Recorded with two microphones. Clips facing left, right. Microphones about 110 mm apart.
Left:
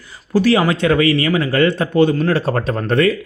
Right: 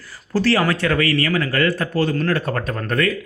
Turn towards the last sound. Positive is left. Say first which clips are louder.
# left 6 dB
turn(degrees=25)  # may be behind; listen again after turning